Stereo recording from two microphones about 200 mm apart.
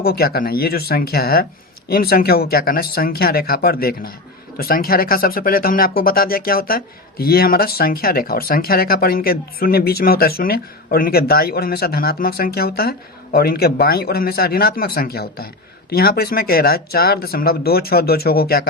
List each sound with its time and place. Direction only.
0.0 s speech: 50° left (ahead or behind)